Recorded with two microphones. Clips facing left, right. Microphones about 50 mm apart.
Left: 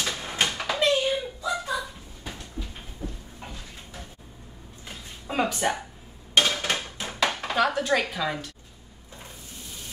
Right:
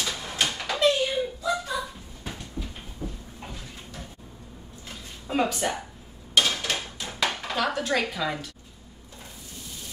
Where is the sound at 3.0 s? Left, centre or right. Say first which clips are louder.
Right 1 dB; centre.